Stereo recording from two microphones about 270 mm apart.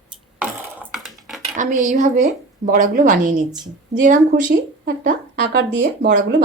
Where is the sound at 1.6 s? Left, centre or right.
Right.